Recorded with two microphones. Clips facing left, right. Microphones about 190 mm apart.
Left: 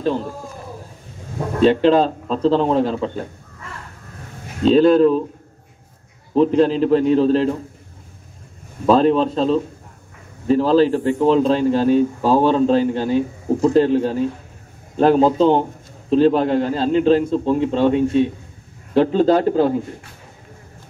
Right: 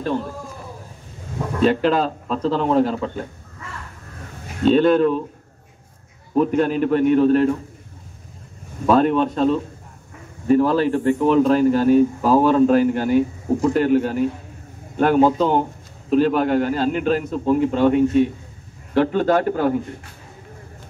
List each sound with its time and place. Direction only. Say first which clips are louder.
1.6 s a man's voice: left 4 dB; 30° left (ahead or behind)
4.7 s a man's voice: left 5 dB; 35° left (ahead or behind)
6.3 s a man's voice: left 3 dB; 30° left (ahead or behind)
8.8 s a man's voice: left 2 dB; 25° left (ahead or behind)